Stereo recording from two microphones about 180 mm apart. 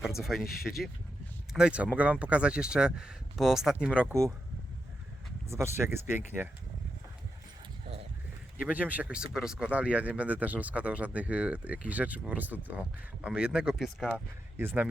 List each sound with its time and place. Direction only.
0.0 s speech: centre (ahead or behind)
1.5 s speech: 5° right (ahead or behind)
4.0 s speech: 15° right (ahead or behind)
5.5 s speech: 15° right (ahead or behind)
8.6 s speech: 10° right (ahead or behind)